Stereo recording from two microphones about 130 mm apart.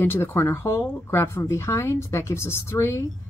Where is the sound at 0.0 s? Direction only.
20° left (ahead or behind).